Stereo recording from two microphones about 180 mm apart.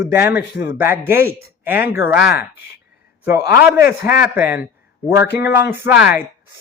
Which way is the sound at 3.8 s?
60° left (ahead or behind).